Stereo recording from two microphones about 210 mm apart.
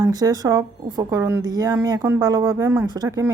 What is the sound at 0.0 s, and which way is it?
Speech, 20° right (ahead or behind).